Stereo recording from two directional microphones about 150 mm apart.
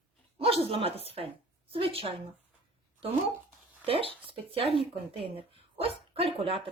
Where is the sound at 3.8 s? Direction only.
40° right (ahead or behind).